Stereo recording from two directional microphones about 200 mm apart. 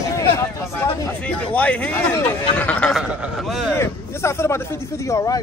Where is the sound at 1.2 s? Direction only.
5° left (ahead or behind).